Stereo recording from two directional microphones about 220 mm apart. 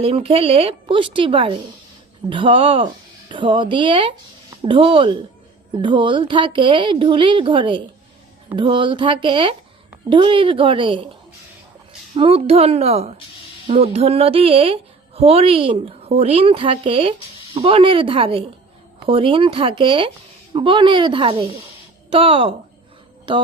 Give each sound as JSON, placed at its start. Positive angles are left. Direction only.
{"t": 0.0, "sound": "speech", "side_deg": -25}
{"t": 12.1, "sound": "speech", "side_deg": -25}